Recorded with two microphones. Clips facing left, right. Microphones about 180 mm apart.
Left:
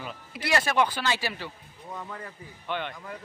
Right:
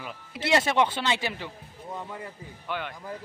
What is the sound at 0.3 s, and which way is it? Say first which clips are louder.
Speech: right 3 dB; 25° right (ahead or behind).